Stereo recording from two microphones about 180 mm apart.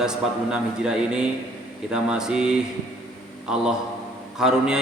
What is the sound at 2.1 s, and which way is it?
Speech, 5° right (ahead or behind).